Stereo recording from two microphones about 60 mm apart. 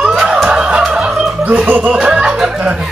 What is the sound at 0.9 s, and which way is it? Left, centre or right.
Fowl, centre.